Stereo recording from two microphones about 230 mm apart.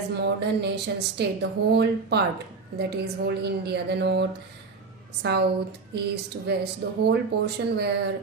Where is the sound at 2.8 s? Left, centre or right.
Right.